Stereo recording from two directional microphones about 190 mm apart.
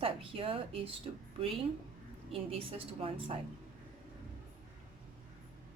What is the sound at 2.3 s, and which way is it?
Speech, 30° right (ahead or behind).